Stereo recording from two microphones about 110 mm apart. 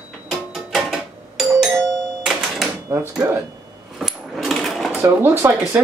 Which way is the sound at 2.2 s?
Centre (ahead or behind).